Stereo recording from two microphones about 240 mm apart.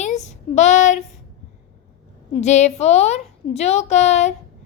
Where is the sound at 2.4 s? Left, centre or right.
Left.